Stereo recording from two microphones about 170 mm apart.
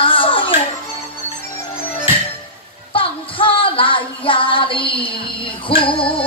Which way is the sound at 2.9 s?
30° left (ahead or behind).